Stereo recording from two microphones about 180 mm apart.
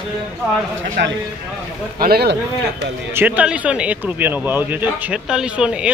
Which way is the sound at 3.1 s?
10° right (ahead or behind).